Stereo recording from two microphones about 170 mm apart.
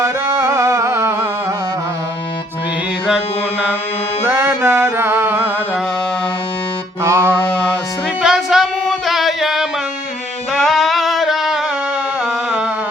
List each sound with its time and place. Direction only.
0.0 s music: 15° right (ahead or behind)
4.3 s music: 10° right (ahead or behind)
7.0 s music: 15° right (ahead or behind)
7.5 s music: 5° left (ahead or behind)
9.0 s singing: centre (ahead or behind)
12.2 s music: 5° right (ahead or behind)